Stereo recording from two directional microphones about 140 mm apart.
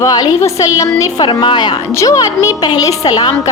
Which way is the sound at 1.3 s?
35° left (ahead or behind).